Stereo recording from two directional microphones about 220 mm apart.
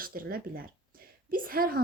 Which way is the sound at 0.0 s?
40° right (ahead or behind).